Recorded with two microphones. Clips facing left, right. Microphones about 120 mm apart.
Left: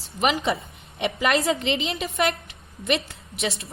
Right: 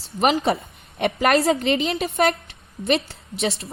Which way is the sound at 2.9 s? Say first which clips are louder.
Right 3 dB; 30° right (ahead or behind).